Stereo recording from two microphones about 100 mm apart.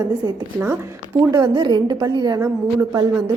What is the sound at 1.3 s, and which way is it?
A woman's voice, 40° right (ahead or behind).